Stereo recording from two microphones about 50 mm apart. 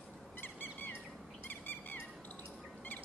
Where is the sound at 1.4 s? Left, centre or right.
Left.